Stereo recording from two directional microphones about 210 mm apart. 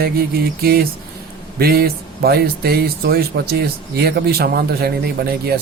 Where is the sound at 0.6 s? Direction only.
45° right (ahead or behind).